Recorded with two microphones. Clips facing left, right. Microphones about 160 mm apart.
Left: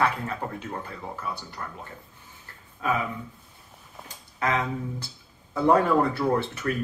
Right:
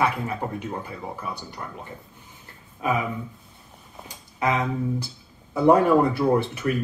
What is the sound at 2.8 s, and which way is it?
Speech, 15° right (ahead or behind).